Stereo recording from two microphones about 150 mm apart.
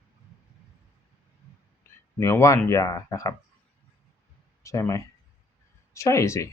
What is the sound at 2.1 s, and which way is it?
Speech, 20° left (ahead or behind).